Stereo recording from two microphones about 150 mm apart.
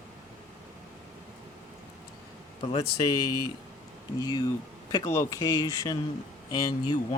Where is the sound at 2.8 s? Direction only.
30° left (ahead or behind).